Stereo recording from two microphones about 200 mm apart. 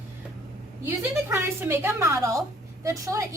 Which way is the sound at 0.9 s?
10° right (ahead or behind).